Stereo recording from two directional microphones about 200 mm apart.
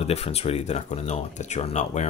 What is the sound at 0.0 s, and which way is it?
Speech, 30° left (ahead or behind).